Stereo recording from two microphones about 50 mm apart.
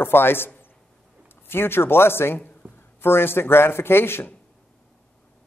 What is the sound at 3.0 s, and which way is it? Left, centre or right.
A man's voice, left.